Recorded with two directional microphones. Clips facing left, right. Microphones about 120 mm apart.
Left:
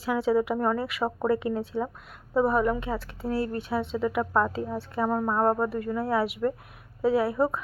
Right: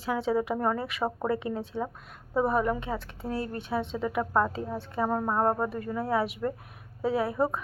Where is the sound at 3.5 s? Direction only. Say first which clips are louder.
Left 2 dB; 20° right (ahead or behind).